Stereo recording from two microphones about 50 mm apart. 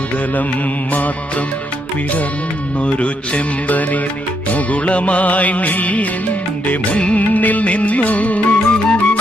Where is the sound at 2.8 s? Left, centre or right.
Left.